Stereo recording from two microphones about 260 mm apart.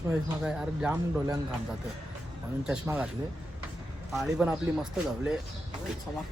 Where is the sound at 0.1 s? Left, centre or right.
Centre.